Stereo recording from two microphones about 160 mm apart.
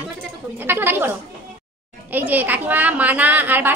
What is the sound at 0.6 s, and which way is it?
A woman's voice, 15° right (ahead or behind).